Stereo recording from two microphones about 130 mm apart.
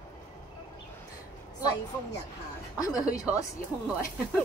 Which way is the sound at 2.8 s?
30° left (ahead or behind).